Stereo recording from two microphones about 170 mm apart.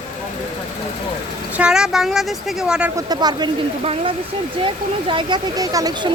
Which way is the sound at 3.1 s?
25° right (ahead or behind).